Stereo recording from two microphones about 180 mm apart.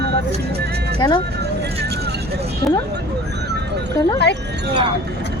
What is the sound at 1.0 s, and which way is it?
Speech, 25° left (ahead or behind).